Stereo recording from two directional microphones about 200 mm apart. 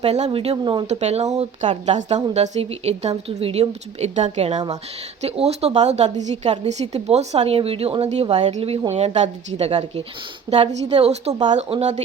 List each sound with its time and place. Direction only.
0.0 s a woman's voice: 30° right (ahead or behind)